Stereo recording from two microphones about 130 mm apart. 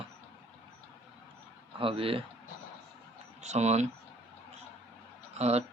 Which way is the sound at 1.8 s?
45° right (ahead or behind).